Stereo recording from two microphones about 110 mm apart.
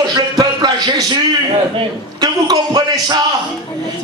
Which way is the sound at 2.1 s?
40° right (ahead or behind).